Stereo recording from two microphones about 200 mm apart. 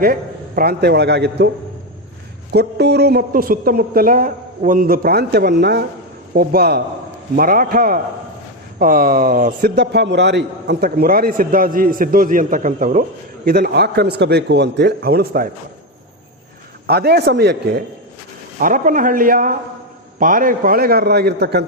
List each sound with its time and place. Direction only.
0.0 s a man's voice: 45° right (ahead or behind)
2.5 s a man's voice: 55° right (ahead or behind)
16.8 s a man's voice: 50° right (ahead or behind)
18.6 s a man's voice: 40° right (ahead or behind)